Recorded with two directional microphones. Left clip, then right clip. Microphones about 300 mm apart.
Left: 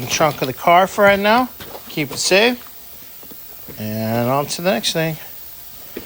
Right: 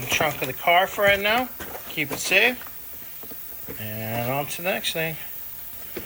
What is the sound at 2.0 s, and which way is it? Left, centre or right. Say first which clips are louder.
Speech: left 5 dB; left.